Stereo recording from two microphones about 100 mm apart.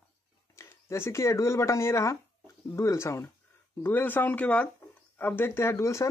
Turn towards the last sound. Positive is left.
turn(degrees=30)  # may be behind; listen again after turning